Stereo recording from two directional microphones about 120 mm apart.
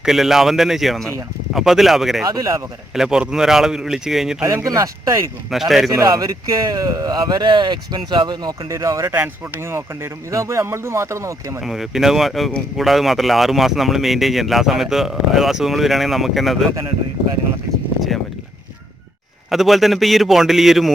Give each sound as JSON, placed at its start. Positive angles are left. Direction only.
{"t": 0.0, "sound": "speech", "side_deg": -5}
{"t": 2.2, "sound": "speech", "side_deg": -30}
{"t": 2.9, "sound": "speech", "side_deg": -5}
{"t": 4.4, "sound": "speech", "side_deg": -25}
{"t": 5.5, "sound": "speech", "side_deg": 0}
{"t": 5.9, "sound": "speech", "side_deg": -30}
{"t": 11.6, "sound": "speech", "side_deg": 0}
{"t": 19.5, "sound": "speech", "side_deg": 0}